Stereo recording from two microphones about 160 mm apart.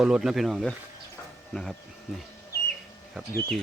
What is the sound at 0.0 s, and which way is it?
Speech, 5° right (ahead or behind).